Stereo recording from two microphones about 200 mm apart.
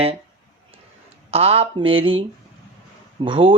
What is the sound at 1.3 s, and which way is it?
Speech, 30° right (ahead or behind).